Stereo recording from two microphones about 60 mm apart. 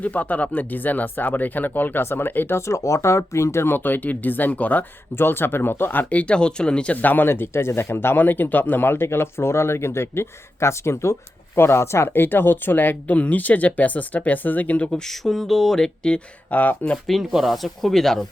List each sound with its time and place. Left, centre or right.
0.0 s speech: left
2.6 s speech: left
3.8 s speech: left
6.1 s speech: left
6.9 s speech: left
14.9 s speech: centre
16.5 s speech: left
17.1 s speech: centre